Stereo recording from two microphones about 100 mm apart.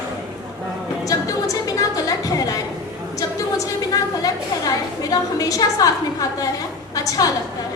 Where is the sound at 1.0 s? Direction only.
35° left (ahead or behind).